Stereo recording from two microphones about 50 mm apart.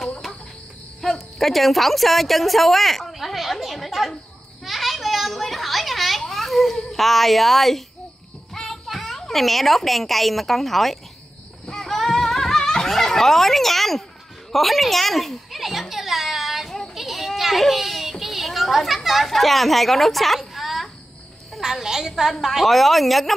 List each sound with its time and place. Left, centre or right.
1.0 s a woman's voice: centre
4.6 s children playing: centre
8.5 s a child's voice: centre
11.6 s a sound: centre
16.9 s children playing: centre
21.5 s speech: centre